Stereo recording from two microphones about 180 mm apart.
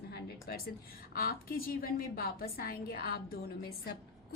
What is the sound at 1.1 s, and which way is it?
Speech, 55° left (ahead or behind).